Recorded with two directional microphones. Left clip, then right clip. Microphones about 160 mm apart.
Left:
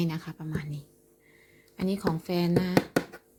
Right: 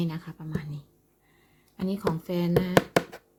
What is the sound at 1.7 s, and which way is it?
Speech, 10° left (ahead or behind).